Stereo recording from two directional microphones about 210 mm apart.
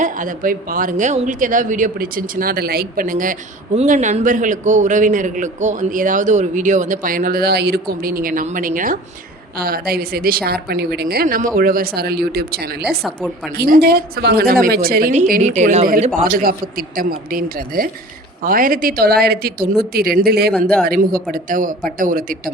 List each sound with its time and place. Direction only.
0.0 s a man's voice: 40° right (ahead or behind)
13.0 s a woman's voice: centre (ahead or behind)
13.6 s a woman's voice: 45° right (ahead or behind)